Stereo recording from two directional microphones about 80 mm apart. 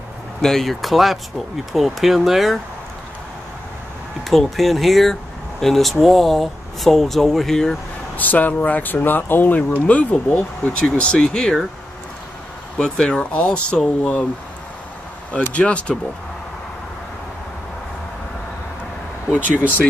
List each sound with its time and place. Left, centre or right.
0.4 s speech: centre
4.2 s speech: centre
8.2 s speech: left
12.7 s speech: centre
15.3 s speech: centre